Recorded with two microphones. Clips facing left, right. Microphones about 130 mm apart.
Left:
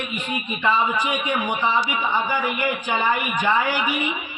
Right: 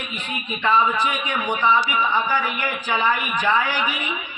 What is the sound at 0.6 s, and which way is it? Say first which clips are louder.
A man's voice: right 2 dB; 10° left (ahead or behind).